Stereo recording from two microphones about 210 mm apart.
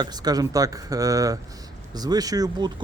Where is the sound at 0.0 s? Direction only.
20° right (ahead or behind).